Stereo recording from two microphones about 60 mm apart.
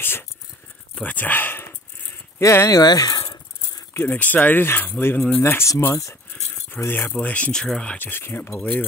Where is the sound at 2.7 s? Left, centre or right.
Left.